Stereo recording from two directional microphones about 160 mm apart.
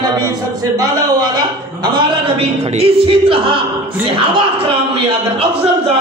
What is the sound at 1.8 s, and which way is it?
Speech, 35° right (ahead or behind).